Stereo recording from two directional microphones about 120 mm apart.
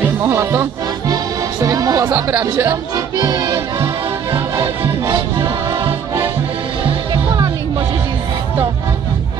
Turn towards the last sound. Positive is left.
turn(degrees=-35)  # may be behind; listen again after turning